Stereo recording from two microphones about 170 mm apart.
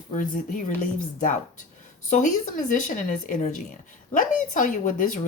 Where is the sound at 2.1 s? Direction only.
50° left (ahead or behind).